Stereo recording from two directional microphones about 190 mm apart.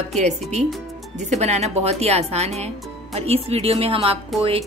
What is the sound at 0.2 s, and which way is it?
Speech, 35° right (ahead or behind).